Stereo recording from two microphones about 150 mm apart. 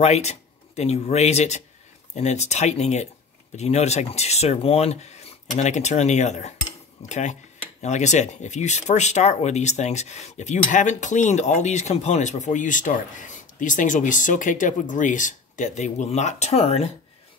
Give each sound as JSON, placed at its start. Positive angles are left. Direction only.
{"t": 0.0, "sound": "speech", "side_deg": 45}